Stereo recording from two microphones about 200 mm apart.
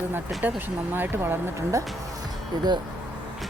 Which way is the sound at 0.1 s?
10° right (ahead or behind).